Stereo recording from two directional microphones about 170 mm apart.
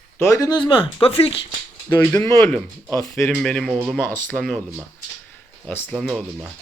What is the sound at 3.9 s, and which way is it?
Speech, 10° left (ahead or behind).